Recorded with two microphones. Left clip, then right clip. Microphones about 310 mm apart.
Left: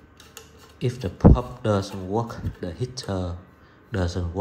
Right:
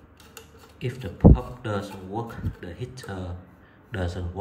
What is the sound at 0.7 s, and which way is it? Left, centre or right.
A man's voice, centre.